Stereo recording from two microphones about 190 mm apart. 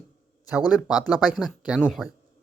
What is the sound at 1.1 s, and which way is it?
Speech, 5° right (ahead or behind).